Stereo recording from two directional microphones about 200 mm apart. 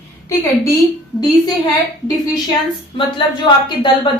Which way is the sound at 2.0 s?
20° left (ahead or behind).